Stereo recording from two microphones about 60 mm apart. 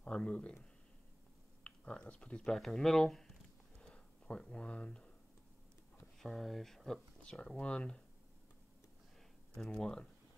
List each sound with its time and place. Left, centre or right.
0.0 s speech: centre
1.6 s speech: centre
2.5 s speech: centre
3.9 s a sound: centre
6.1 s speech: centre
7.2 s speech: centre
9.6 s speech: centre